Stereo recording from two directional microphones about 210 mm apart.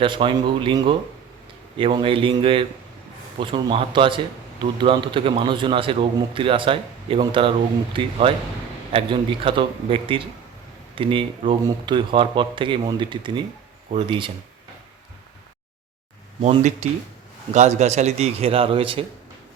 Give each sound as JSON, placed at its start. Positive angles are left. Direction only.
{"t": 0.0, "sound": "a man's voice", "side_deg": -25}
{"t": 16.4, "sound": "a man's voice", "side_deg": -35}